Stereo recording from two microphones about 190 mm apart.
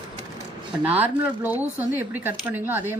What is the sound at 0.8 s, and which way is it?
Speech, 10° right (ahead or behind).